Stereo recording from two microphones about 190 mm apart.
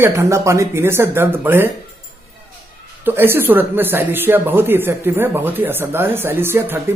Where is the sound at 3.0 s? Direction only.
10° right (ahead or behind).